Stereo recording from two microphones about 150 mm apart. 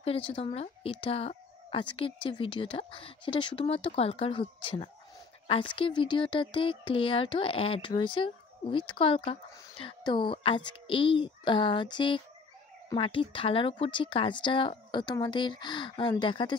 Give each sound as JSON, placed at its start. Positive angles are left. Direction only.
{"t": 0.0, "sound": "speech", "side_deg": 40}